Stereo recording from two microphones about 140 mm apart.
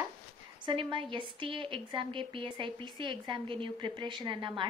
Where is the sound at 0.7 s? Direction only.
35° right (ahead or behind).